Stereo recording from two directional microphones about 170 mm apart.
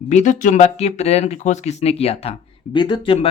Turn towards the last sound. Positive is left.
turn(degrees=35)  # may be behind; listen again after turning